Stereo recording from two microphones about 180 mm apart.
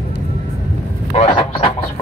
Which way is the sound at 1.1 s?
35° left (ahead or behind).